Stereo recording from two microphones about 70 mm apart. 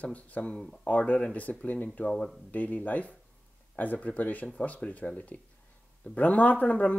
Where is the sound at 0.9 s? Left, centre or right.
Left.